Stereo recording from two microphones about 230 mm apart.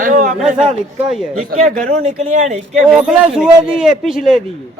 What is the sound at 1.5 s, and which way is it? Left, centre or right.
Speech, right.